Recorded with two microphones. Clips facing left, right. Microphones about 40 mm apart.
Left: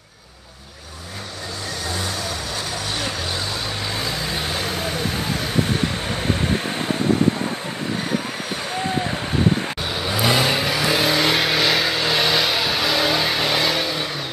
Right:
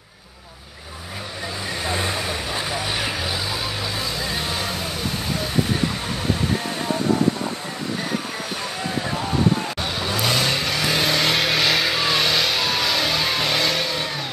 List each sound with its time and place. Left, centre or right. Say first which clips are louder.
1.9 s vehicle: right 3 dB; right
4.2 s vehicle: left 1 dB; centre
9.9 s vehicle: left 3 dB; centre